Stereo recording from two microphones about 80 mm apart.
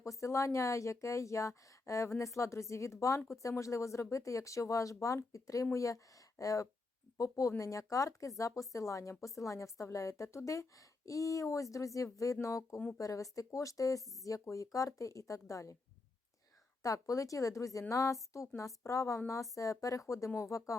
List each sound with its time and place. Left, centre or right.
0.0 s a woman's voice: left
16.8 s a woman's voice: left